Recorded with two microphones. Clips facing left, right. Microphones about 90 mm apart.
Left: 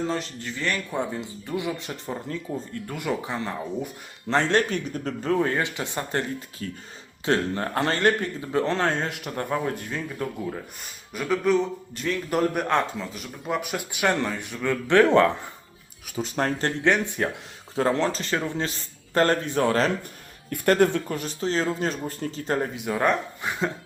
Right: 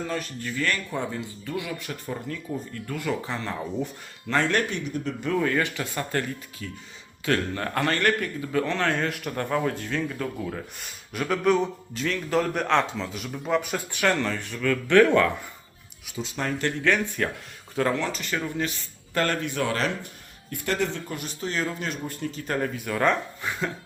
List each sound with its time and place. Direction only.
0.1 s a man's voice: 20° left (ahead or behind)
4.7 s a man's voice: 40° left (ahead or behind)
5.5 s a man's voice: 20° left (ahead or behind)
6.6 s speech: 40° left (ahead or behind)
7.3 s a man's voice: 25° left (ahead or behind)
10.8 s a man's voice: centre (ahead or behind); by 15.3 s 25° left (ahead or behind)
16.0 s speech: 45° left (ahead or behind)
16.8 s a man's voice: 20° left (ahead or behind)
17.7 s a man's voice: 35° left (ahead or behind)
20.5 s speech: 50° left (ahead or behind)
21.2 s a man's voice: 35° left (ahead or behind); by 23.7 s 20° left (ahead or behind)